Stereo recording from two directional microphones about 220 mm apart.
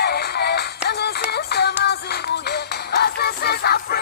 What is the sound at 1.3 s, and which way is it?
Music, 45° left (ahead or behind).